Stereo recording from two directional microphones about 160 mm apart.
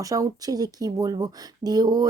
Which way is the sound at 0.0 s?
20° right (ahead or behind).